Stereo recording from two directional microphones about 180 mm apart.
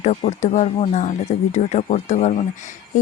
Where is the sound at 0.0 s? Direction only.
40° left (ahead or behind).